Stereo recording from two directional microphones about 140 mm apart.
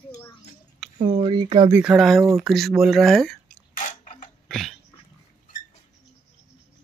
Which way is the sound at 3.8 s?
60° left (ahead or behind).